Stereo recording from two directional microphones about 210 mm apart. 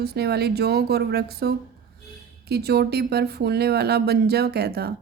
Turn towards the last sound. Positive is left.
turn(degrees=-50)  # may be behind; listen again after turning